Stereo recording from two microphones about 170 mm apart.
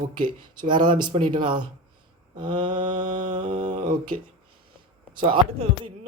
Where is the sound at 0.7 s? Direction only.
25° right (ahead or behind).